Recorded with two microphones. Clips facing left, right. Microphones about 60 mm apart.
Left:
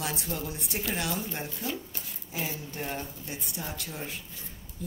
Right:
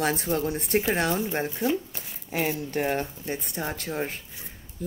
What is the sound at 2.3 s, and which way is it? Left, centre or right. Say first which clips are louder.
Speech: right 9 dB; right.